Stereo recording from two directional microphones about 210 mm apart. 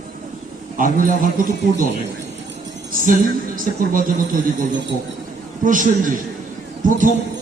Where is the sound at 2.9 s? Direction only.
40° right (ahead or behind).